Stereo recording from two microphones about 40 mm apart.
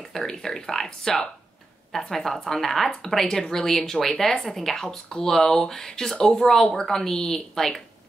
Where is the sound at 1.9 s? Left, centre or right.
Centre.